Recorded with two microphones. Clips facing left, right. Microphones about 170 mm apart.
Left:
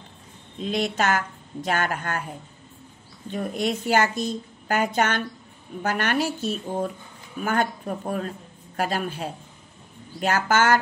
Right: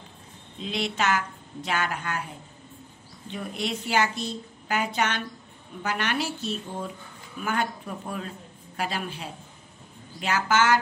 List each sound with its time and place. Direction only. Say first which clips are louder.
0.6 s a woman's voice: left 4 dB; 45° left (ahead or behind)
3.3 s a woman's voice: left 5 dB; 45° left (ahead or behind)